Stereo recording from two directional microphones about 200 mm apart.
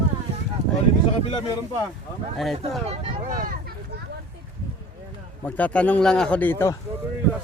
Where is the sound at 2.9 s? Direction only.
45° right (ahead or behind).